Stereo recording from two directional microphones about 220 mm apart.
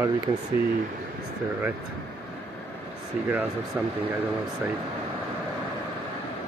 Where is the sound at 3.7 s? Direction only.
5° right (ahead or behind).